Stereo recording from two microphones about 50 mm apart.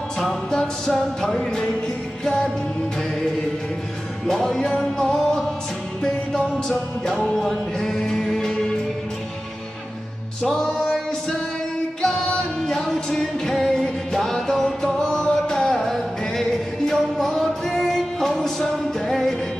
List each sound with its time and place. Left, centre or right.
0.5 s music: centre
4.3 s music: centre
7.3 s music: centre
10.7 s music: centre